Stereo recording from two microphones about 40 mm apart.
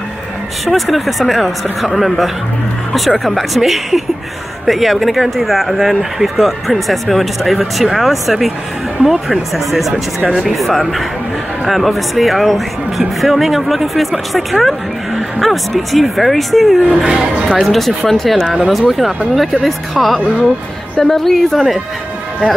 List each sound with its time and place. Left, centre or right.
0.7 s speech: centre
17.0 s speech: centre
17.5 s speech: centre
18.7 s a woman's voice: centre